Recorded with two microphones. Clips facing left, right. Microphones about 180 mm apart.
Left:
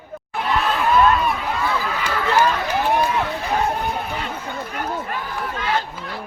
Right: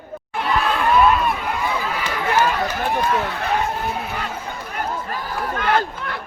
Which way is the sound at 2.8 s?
65° right (ahead or behind).